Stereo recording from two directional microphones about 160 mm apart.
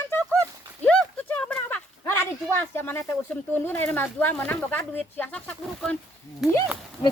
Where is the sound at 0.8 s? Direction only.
10° left (ahead or behind).